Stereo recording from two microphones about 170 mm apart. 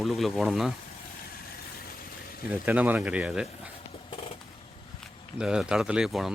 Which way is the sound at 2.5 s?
10° right (ahead or behind).